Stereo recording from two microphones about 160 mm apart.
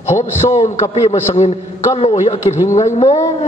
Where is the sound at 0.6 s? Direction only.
45° left (ahead or behind).